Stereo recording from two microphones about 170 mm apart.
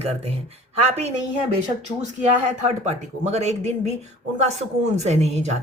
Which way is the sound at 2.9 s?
40° right (ahead or behind).